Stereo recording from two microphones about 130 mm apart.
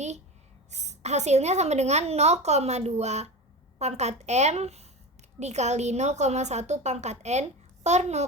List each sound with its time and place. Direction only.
0.7 s a woman's voice: 60° right (ahead or behind)